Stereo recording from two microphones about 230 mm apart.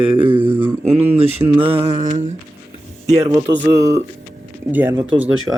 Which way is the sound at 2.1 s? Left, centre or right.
Right.